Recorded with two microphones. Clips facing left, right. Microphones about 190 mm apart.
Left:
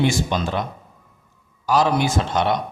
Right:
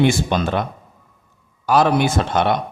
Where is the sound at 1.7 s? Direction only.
55° right (ahead or behind).